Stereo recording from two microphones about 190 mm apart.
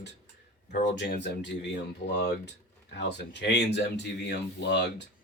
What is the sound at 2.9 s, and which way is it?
Speech, 65° left (ahead or behind).